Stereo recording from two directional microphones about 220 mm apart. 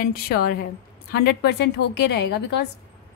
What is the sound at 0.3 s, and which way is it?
A woman's voice, 45° left (ahead or behind).